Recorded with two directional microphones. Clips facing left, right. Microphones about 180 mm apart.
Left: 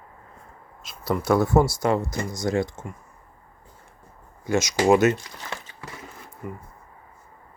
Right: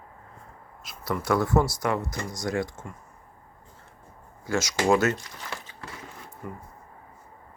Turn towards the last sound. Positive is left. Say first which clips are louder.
# left 3 dB
turn(degrees=5)  # may be behind; listen again after turning